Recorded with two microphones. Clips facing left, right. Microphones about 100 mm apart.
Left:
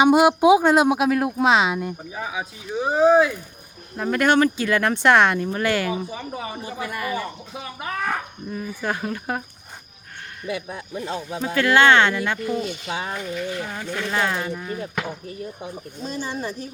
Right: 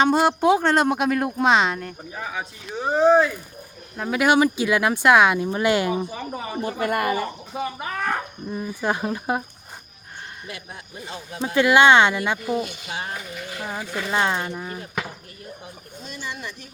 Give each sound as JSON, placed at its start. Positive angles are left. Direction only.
{"t": 0.0, "sound": "speech", "side_deg": 10}
{"t": 5.5, "sound": "speech", "side_deg": -20}
{"t": 6.1, "sound": "speech", "side_deg": 0}
{"t": 6.6, "sound": "speech", "side_deg": -60}
{"t": 7.5, "sound": "speech", "side_deg": 0}
{"t": 8.5, "sound": "speech", "side_deg": -20}
{"t": 11.3, "sound": "speech", "side_deg": -15}
{"t": 12.4, "sound": "speech", "side_deg": -5}
{"t": 16.0, "sound": "speech", "side_deg": 35}